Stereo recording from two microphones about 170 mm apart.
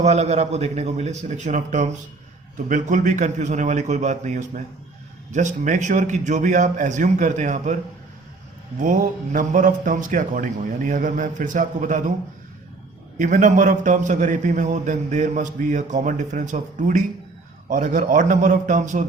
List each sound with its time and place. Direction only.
0.0 s a man's voice: 40° right (ahead or behind)
8.8 s a man's voice: 50° right (ahead or behind)
13.1 s a man's voice: 50° right (ahead or behind)